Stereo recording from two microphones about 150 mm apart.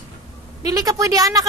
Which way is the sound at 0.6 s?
25° right (ahead or behind).